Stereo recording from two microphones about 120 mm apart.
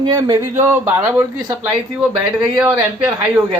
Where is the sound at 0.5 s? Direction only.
20° right (ahead or behind).